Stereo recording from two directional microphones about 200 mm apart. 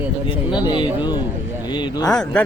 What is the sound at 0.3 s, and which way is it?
Speech, 25° left (ahead or behind).